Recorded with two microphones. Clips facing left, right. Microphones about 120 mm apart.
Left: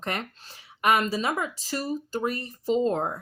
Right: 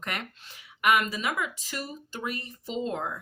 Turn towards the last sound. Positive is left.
turn(degrees=40)  # may be behind; listen again after turning